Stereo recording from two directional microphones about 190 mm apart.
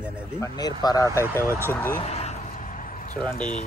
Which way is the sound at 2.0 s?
35° left (ahead or behind).